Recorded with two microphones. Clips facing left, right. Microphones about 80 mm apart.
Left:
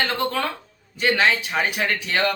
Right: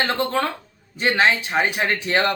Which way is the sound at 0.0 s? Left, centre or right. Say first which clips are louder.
Right 2 dB; right.